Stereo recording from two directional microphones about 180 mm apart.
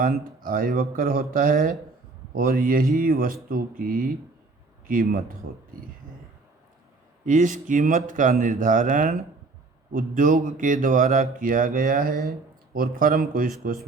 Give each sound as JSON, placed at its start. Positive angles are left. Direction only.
{"t": 0.3, "sound": "speech", "side_deg": -50}
{"t": 7.3, "sound": "speech", "side_deg": -45}